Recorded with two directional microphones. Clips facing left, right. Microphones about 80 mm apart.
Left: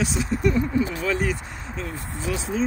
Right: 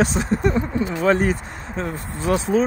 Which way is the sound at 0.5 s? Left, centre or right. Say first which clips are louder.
Right 1 dB; right.